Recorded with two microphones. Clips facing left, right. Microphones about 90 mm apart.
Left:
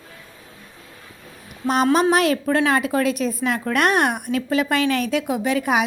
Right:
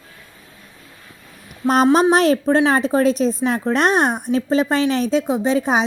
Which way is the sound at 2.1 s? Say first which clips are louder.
Right 3 dB; 35° right (ahead or behind).